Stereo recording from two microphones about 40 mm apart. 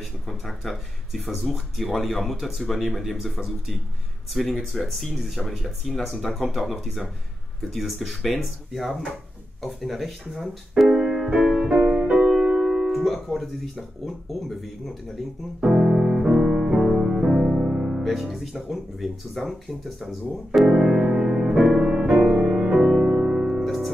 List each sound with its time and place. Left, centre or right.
0.3 s speech: centre
10.9 s music: right
11.8 s music: right
12.8 s music: centre
13.1 s speech: centre
15.6 s music: centre
17.6 s music: centre
18.0 s speech: centre
20.8 s music: right
21.3 s music: centre
23.6 s music: centre